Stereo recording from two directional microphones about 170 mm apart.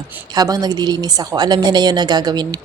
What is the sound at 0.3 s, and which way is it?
A woman's voice, 20° right (ahead or behind).